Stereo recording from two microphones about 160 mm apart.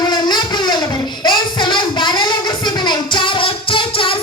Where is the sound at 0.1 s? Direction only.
30° left (ahead or behind).